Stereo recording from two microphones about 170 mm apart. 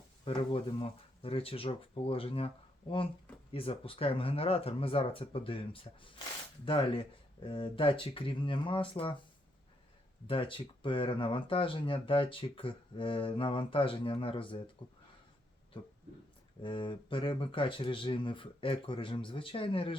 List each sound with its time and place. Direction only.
0.3 s speech: 30° left (ahead or behind)
10.2 s speech: 30° left (ahead or behind)
16.6 s speech: 30° left (ahead or behind)